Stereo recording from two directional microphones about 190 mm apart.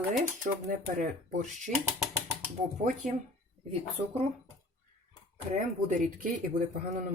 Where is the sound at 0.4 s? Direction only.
40° right (ahead or behind).